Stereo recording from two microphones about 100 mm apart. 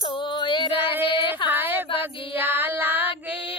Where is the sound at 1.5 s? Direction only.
20° right (ahead or behind).